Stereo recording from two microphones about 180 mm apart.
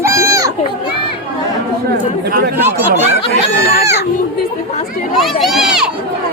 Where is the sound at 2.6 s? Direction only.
10° right (ahead or behind).